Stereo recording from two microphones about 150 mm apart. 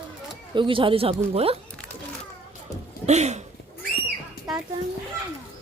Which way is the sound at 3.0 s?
50° right (ahead or behind).